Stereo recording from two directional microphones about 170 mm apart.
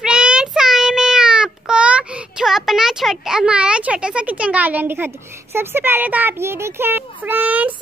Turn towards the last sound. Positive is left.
turn(degrees=-10)  # may be behind; listen again after turning